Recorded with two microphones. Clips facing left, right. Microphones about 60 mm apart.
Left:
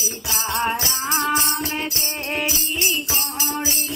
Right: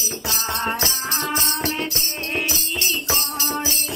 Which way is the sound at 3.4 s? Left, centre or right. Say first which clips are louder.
Even; centre.